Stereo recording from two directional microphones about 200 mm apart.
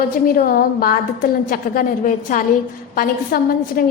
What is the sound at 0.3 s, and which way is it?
A woman's voice, 45° left (ahead or behind).